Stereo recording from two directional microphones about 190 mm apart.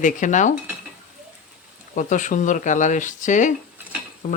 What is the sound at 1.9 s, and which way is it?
Speech, 40° left (ahead or behind).